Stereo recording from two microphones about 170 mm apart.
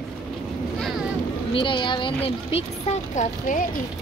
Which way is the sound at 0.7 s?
Centre (ahead or behind).